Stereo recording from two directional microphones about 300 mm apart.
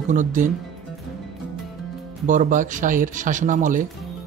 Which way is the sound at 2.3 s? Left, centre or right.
Right.